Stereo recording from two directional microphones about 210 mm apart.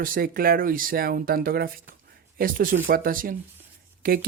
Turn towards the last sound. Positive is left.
turn(degrees=-45)  # may be behind; listen again after turning